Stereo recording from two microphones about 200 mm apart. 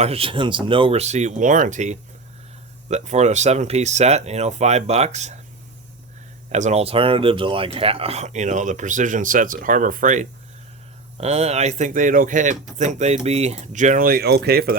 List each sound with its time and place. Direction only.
0.0 s speech: 30° right (ahead or behind)
6.5 s speech: 35° right (ahead or behind)